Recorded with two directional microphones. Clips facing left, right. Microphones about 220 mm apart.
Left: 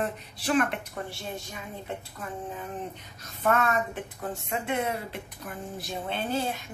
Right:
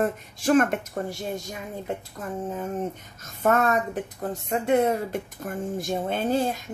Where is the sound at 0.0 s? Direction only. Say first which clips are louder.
Right 6 dB; 45° right (ahead or behind).